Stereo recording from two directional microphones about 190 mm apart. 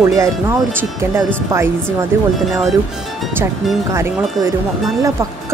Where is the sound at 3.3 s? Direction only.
15° right (ahead or behind).